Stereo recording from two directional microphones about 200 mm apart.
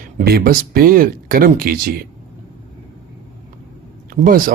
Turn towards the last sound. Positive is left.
turn(degrees=-45)  # may be behind; listen again after turning